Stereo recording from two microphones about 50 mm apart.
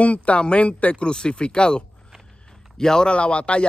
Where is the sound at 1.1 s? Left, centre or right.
Centre.